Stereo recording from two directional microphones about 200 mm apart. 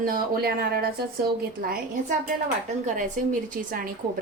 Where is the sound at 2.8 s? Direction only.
40° right (ahead or behind).